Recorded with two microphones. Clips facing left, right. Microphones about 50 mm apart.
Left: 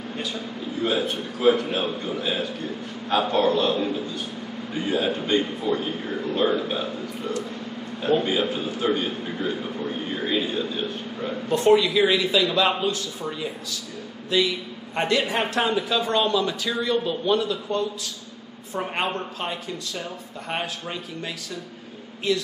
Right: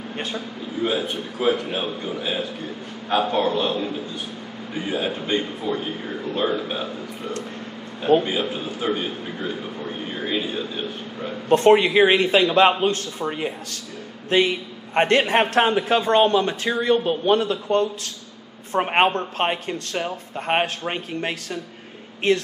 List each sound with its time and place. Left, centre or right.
1.6 s a man's voice: centre
11.4 s a man's voice: right